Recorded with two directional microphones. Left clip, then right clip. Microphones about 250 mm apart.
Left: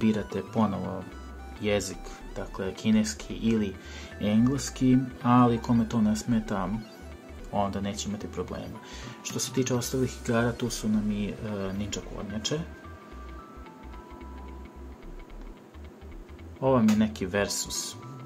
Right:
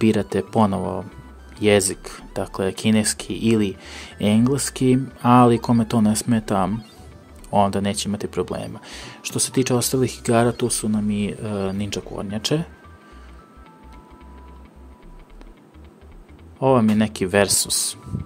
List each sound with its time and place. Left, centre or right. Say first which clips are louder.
0.0 s speech: right 9 dB; right
16.5 s speech: right 7 dB; right